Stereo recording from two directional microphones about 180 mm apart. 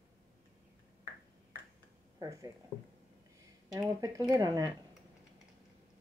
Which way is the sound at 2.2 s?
20° right (ahead or behind).